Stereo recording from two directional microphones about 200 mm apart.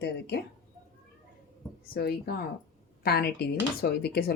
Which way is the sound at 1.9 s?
50° left (ahead or behind).